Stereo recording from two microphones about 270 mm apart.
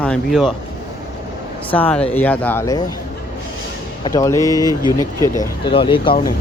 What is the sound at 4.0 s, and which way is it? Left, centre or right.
Speech, centre.